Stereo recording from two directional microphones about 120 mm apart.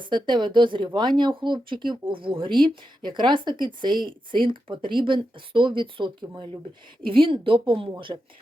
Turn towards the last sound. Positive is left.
turn(degrees=-45)  # may be behind; listen again after turning